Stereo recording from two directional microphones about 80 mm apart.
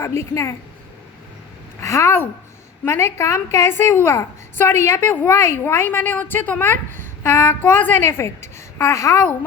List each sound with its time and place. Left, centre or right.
0.0 s a woman's voice: left
1.8 s a woman's voice: left